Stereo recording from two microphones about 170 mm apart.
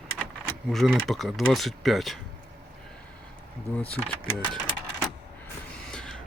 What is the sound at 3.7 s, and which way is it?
Speech, 10° left (ahead or behind).